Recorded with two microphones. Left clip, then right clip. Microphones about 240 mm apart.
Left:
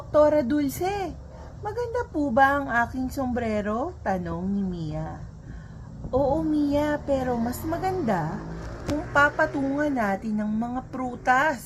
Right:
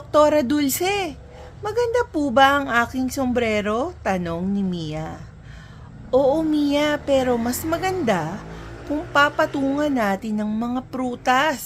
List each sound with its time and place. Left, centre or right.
0.1 s speech: right